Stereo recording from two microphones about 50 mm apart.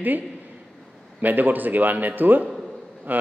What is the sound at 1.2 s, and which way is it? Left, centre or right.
A man's voice, right.